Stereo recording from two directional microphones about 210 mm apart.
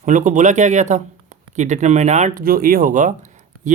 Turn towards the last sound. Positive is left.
turn(degrees=-35)  # may be behind; listen again after turning